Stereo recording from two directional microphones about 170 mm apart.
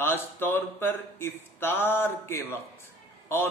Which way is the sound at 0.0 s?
15° left (ahead or behind).